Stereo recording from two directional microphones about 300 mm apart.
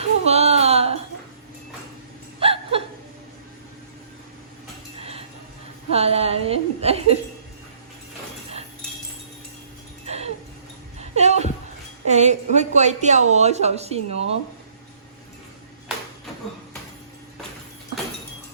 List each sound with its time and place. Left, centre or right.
0.0 s a sound: right
2.4 s chuckle: centre
4.9 s cutlery: centre
5.9 s a woman's voice: centre
10.1 s a sound: right
12.0 s a woman's voice: right